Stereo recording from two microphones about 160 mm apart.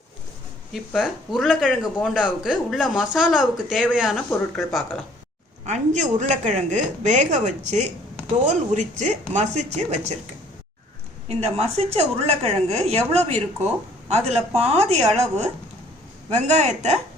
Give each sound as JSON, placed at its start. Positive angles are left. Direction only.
{"t": 0.7, "sound": "speech", "side_deg": 0}
{"t": 5.6, "sound": "speech", "side_deg": -45}
{"t": 11.3, "sound": "a woman's voice", "side_deg": -40}